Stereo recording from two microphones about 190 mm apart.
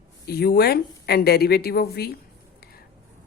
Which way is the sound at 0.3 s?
55° left (ahead or behind).